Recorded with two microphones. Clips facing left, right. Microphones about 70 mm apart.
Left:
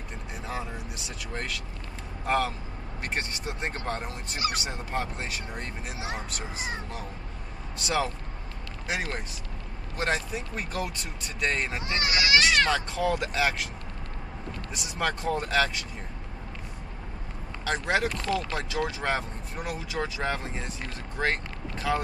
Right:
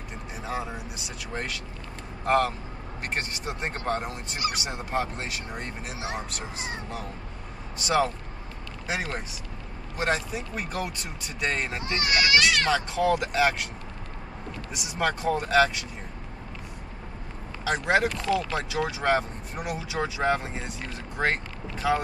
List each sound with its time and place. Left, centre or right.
0.4 s speech: centre
9.9 s speech: centre
11.8 s speech: left
12.6 s speech: centre
14.7 s speech: centre
17.6 s speech: centre